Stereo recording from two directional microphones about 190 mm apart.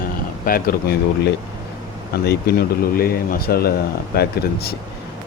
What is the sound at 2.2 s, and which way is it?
Speech, 55° left (ahead or behind).